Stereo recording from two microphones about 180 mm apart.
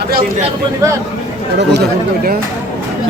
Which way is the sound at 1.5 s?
65° right (ahead or behind).